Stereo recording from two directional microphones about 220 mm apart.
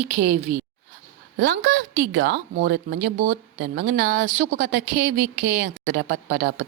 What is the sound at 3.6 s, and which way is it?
Speech, 45° right (ahead or behind).